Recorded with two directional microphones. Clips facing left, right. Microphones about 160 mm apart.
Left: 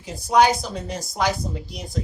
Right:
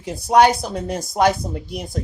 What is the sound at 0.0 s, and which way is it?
Speech, 65° right (ahead or behind).